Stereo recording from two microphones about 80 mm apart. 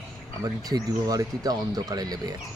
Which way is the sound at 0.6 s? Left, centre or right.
Right.